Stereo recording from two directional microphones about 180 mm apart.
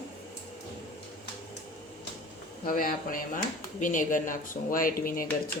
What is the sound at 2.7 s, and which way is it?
Speech, 50° left (ahead or behind).